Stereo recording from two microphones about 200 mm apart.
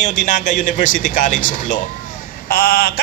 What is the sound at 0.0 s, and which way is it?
A man's voice, 40° left (ahead or behind).